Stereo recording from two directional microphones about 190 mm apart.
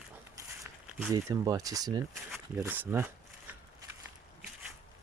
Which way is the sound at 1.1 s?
20° right (ahead or behind).